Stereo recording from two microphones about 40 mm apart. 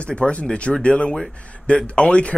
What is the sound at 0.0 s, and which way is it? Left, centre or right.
Speech, left.